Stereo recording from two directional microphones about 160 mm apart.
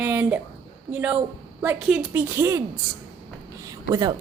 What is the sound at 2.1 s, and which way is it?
Speech, 15° right (ahead or behind).